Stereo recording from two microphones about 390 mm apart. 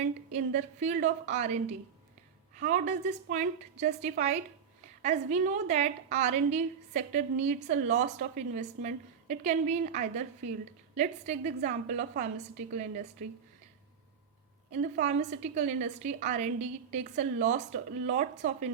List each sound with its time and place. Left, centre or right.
0.3 s a woman's voice: centre
14.7 s a woman's voice: centre